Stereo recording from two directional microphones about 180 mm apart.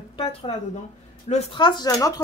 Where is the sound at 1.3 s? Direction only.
25° left (ahead or behind).